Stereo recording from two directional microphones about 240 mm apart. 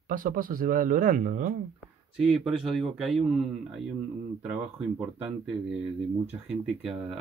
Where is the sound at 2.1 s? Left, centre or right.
Centre.